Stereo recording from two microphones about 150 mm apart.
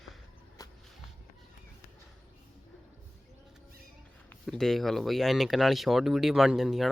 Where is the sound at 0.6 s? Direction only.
25° left (ahead or behind).